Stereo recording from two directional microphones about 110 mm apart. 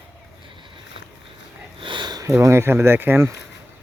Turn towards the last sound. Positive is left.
turn(degrees=-20)  # may be behind; listen again after turning